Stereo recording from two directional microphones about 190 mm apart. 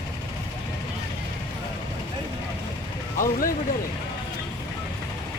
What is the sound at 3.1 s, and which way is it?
Speech, 45° left (ahead or behind).